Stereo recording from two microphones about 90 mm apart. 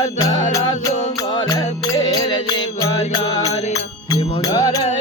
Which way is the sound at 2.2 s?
55° left (ahead or behind).